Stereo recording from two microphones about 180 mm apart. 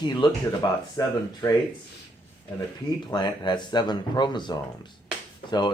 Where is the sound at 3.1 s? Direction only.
25° left (ahead or behind).